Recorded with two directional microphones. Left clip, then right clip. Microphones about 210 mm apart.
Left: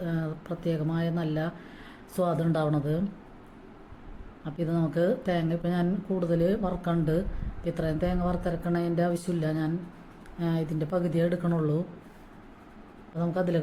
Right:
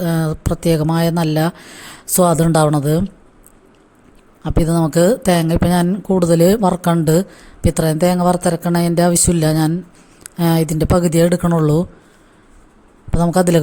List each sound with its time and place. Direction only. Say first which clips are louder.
0.0 s speech: right 14 dB; 50° right (ahead or behind)
4.4 s speech: right 13 dB; 50° right (ahead or behind)
13.1 s speech: right 14 dB; 50° right (ahead or behind)